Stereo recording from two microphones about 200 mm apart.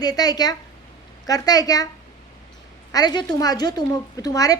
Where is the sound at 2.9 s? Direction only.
20° left (ahead or behind).